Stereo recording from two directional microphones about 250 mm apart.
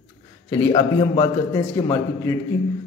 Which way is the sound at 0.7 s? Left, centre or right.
Centre.